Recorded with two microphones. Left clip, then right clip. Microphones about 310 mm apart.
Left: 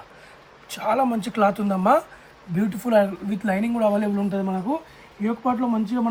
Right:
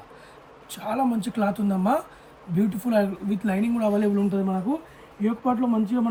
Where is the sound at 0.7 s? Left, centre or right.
Centre.